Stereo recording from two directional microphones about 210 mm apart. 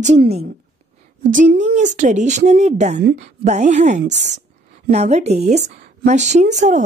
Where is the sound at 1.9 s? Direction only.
35° right (ahead or behind).